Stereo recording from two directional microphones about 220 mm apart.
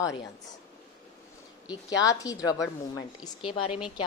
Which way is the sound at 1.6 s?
15° left (ahead or behind).